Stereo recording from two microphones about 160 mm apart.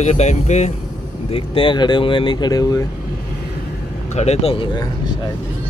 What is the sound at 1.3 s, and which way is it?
Speech, 35° left (ahead or behind).